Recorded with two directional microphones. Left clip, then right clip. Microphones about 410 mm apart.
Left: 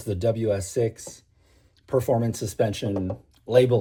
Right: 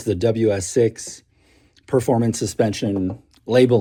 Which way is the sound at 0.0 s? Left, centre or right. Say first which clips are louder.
Right 6 dB; centre.